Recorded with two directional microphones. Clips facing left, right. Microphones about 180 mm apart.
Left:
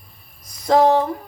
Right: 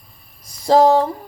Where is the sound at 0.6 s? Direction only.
30° right (ahead or behind).